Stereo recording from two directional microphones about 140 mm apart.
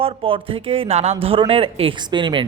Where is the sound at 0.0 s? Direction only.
40° right (ahead or behind).